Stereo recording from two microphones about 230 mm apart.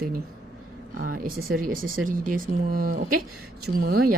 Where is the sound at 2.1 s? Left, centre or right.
Right.